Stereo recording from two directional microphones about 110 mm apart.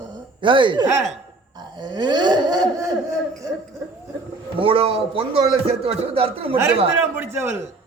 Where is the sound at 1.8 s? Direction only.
40° right (ahead or behind).